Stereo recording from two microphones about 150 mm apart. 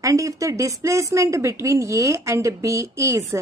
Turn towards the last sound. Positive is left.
turn(degrees=-20)  # may be behind; listen again after turning